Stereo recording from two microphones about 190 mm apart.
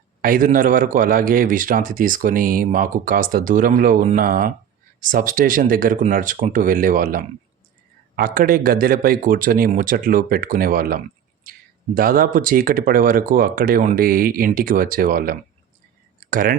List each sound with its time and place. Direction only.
0.2 s a man's voice: 45° right (ahead or behind)
11.5 s a sound: 50° right (ahead or behind)
11.9 s a man's voice: 50° right (ahead or behind)